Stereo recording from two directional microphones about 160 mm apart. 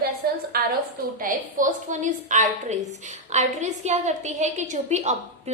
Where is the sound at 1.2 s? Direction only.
55° right (ahead or behind).